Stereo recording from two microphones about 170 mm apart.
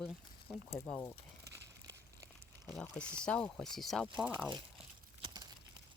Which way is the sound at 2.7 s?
5° left (ahead or behind).